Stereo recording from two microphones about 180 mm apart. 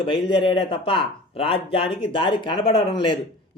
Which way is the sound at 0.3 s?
25° left (ahead or behind).